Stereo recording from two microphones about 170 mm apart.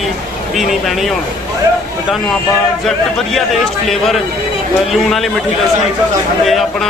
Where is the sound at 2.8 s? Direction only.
Centre (ahead or behind).